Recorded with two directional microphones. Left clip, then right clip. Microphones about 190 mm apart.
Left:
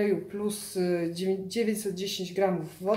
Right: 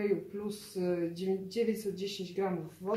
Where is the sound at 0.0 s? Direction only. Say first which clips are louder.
Left 5 dB; 30° left (ahead or behind).